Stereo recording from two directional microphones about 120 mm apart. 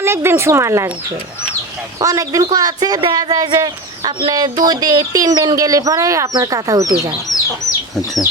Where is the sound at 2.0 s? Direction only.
30° right (ahead or behind).